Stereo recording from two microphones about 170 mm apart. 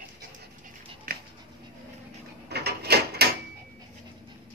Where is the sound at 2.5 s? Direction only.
70° right (ahead or behind).